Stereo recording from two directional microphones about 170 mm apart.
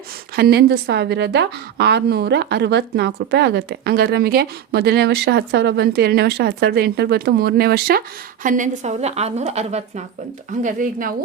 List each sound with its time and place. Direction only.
0.3 s a woman's voice: 65° right (ahead or behind)
8.4 s a woman's voice: 50° right (ahead or behind)
10.6 s a woman's voice: 50° right (ahead or behind)